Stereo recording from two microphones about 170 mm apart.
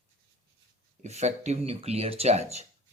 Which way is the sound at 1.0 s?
40° right (ahead or behind).